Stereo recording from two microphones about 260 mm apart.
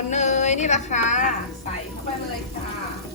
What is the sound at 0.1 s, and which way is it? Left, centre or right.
A woman's voice, left.